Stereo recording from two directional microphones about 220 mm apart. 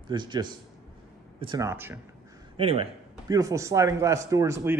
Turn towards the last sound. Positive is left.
turn(degrees=-15)  # may be behind; listen again after turning